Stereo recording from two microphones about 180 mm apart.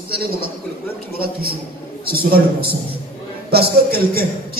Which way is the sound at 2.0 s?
55° right (ahead or behind).